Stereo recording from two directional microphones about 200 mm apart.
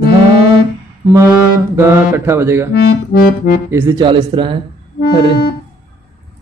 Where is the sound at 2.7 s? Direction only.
55° left (ahead or behind).